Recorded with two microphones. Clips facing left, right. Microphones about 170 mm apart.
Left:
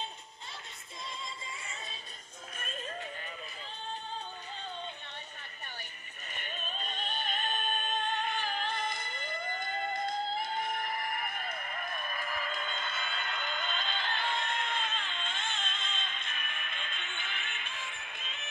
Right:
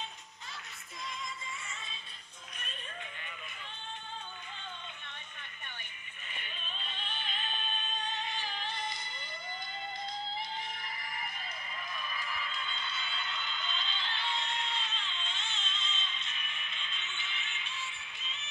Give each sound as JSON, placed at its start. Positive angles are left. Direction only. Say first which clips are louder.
{"t": 6.3, "sound": "music", "louder": "left 5 dB", "side_deg": 45}